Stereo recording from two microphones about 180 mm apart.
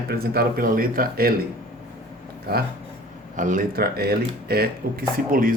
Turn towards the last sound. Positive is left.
turn(degrees=-50)  # may be behind; listen again after turning